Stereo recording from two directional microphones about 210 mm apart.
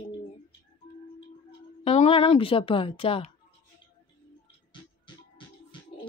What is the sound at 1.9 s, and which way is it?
A woman's voice, 30° left (ahead or behind).